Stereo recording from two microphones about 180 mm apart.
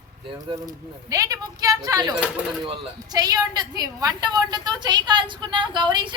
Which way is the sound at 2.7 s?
20° right (ahead or behind).